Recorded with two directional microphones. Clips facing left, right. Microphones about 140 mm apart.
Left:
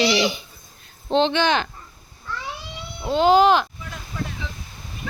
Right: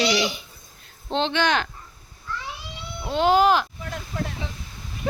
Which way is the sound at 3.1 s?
Centre (ahead or behind).